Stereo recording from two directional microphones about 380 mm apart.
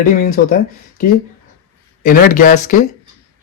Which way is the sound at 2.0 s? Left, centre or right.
Left.